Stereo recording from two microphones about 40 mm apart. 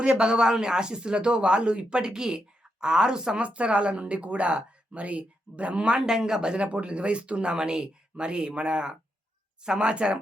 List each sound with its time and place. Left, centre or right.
0.0 s speech: right
3.4 s speech: right
6.0 s speech: centre